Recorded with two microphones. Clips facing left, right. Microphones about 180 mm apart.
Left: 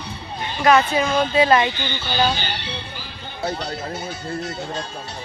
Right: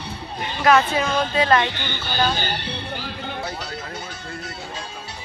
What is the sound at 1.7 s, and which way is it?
Speech, 55° right (ahead or behind).